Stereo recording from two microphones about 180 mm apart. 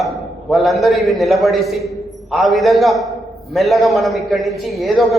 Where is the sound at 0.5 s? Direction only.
Centre (ahead or behind).